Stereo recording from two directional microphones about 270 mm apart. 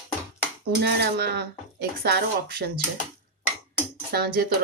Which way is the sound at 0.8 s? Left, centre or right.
Right.